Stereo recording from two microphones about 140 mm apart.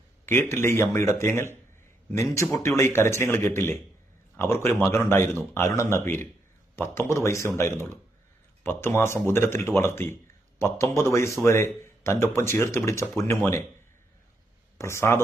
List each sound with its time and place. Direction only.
0.3 s speech: 15° left (ahead or behind)
14.8 s speech: 20° left (ahead or behind)